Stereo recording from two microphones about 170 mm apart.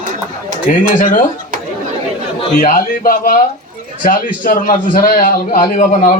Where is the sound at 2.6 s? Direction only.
55° left (ahead or behind).